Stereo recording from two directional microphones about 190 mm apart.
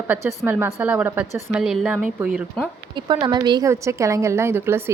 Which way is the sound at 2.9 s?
25° right (ahead or behind).